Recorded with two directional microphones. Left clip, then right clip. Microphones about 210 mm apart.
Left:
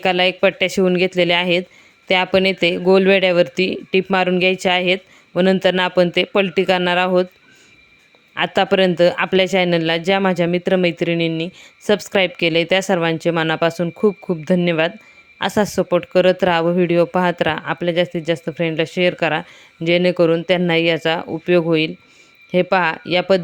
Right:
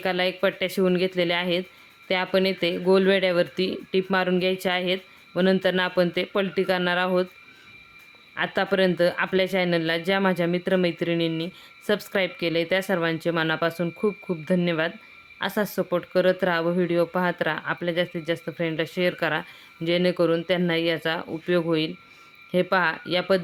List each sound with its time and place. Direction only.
0.0 s speech: 30° left (ahead or behind)
8.4 s speech: 30° left (ahead or behind)